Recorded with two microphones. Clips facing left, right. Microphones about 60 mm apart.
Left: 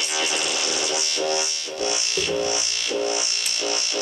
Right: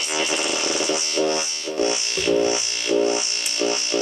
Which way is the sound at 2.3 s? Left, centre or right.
Centre.